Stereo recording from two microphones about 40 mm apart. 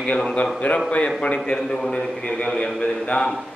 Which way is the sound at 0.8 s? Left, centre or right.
Left.